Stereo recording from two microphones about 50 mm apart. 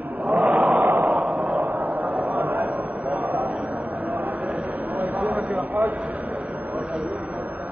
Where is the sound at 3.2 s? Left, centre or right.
Right.